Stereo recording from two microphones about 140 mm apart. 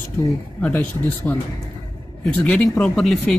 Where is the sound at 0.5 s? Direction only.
10° left (ahead or behind).